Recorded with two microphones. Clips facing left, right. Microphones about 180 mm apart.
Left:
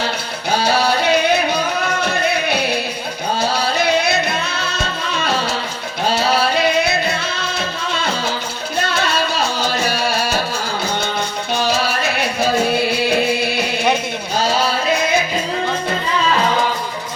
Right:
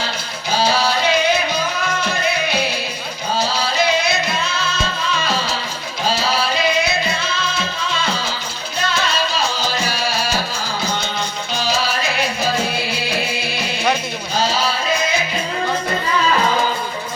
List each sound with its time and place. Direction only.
0.6 s music: 60° left (ahead or behind)
6.1 s music: 60° left (ahead or behind)
8.8 s music: 60° left (ahead or behind)